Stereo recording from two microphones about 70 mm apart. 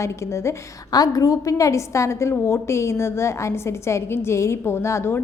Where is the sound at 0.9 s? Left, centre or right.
Left.